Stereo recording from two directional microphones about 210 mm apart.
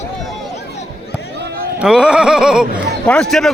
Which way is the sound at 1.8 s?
5° right (ahead or behind).